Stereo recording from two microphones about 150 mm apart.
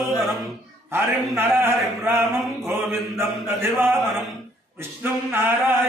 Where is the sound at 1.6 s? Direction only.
15° right (ahead or behind).